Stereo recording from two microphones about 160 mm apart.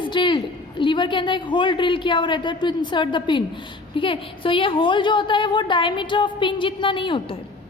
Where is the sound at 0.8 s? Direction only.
30° left (ahead or behind).